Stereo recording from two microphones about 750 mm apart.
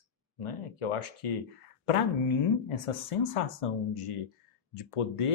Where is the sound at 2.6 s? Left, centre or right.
Left.